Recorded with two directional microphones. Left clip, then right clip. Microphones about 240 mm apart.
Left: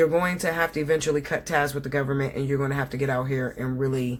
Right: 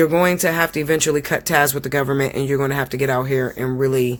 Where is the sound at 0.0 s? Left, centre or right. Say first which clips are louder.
Right 6 dB; right.